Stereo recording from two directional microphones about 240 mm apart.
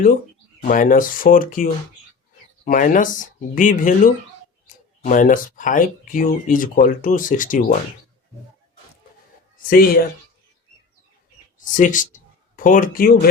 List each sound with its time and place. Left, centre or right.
0.6 s speech: left
9.6 s a woman's voice: left
11.8 s speech: left